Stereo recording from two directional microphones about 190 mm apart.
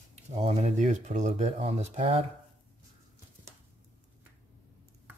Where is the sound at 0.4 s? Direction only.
35° right (ahead or behind).